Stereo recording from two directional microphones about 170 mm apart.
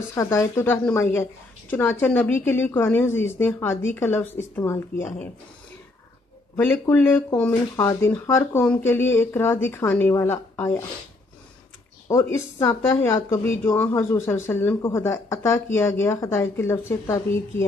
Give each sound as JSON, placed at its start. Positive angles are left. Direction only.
{"t": 0.1, "sound": "speech", "side_deg": 15}
{"t": 6.5, "sound": "speech", "side_deg": 15}
{"t": 12.1, "sound": "speech", "side_deg": 15}